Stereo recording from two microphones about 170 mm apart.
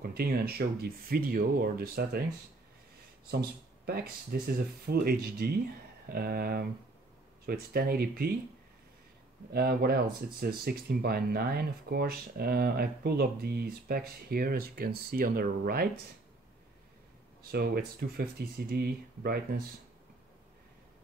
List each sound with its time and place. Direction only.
0.0 s speech: 65° right (ahead or behind)
3.3 s speech: 65° right (ahead or behind)
9.5 s speech: 65° right (ahead or behind)
17.4 s speech: 60° right (ahead or behind)